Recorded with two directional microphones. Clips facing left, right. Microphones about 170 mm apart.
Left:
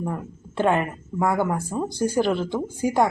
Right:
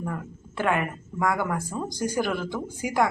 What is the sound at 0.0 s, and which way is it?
Speech, 25° left (ahead or behind).